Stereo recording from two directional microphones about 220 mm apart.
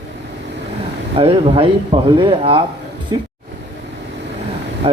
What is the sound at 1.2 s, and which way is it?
A man's voice, 25° right (ahead or behind).